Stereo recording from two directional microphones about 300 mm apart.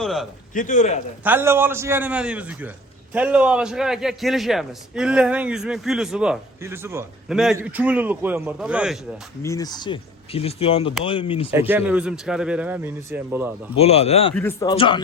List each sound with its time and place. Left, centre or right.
0.0 s a sound: centre
0.5 s speech: left
1.2 s a man's voice: centre
9.4 s speech: centre
11.7 s a man's voice: centre
13.7 s speech: centre
14.3 s speech: centre